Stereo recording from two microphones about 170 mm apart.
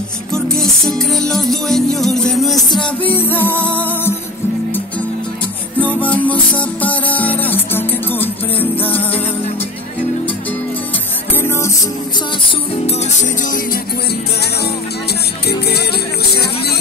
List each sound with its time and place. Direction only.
0.8 s music: centre (ahead or behind)
5.8 s music: 10° left (ahead or behind)
11.3 s music: 15° left (ahead or behind)
12.8 s music: 40° left (ahead or behind)
15.4 s music: 70° left (ahead or behind)